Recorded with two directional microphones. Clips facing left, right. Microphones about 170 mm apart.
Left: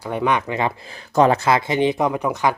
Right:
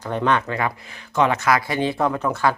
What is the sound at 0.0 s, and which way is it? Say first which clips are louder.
Speech: even; 10° left (ahead or behind).